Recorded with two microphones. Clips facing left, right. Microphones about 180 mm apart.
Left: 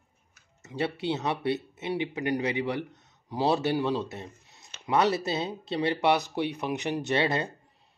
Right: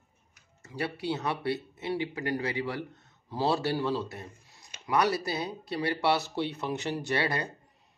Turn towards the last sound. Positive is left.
turn(degrees=25)  # may be behind; listen again after turning